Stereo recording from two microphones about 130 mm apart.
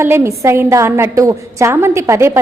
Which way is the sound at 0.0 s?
20° right (ahead or behind).